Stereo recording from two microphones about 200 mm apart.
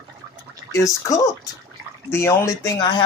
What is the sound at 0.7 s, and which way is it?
Speech, 15° left (ahead or behind).